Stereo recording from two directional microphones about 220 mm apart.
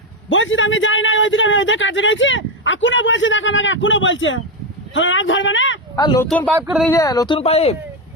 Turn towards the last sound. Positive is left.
turn(degrees=30)  # may be behind; listen again after turning